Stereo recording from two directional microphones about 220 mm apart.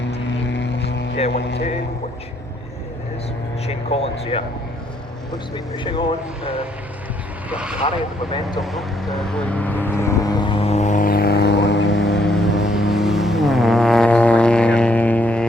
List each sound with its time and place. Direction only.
0.3 s vehicle: 55° left (ahead or behind)
1.3 s speech: 50° left (ahead or behind)
3.7 s speech: 30° left (ahead or behind)
5.5 s speech: 20° left (ahead or behind)
7.5 s speech: 5° right (ahead or behind)
7.8 s speech: 25° left (ahead or behind)
8.6 s vehicle: centre (ahead or behind); by 12.2 s 55° left (ahead or behind)
12.2 s vehicle: centre (ahead or behind)
12.5 s vehicle: 55° left (ahead or behind)
12.7 s music: centre (ahead or behind)